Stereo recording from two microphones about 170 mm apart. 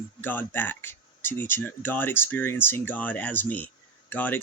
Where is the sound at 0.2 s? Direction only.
10° left (ahead or behind).